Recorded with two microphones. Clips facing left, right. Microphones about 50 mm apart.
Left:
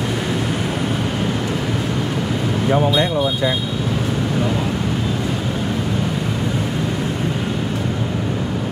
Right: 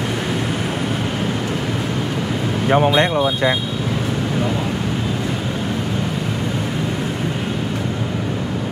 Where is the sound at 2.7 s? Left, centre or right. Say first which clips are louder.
Right 3 dB; right.